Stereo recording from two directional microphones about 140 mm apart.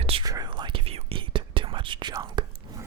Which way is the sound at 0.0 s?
40° right (ahead or behind).